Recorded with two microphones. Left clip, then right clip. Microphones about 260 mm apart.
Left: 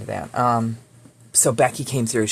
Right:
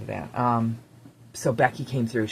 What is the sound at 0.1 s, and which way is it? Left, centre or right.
Speech, left.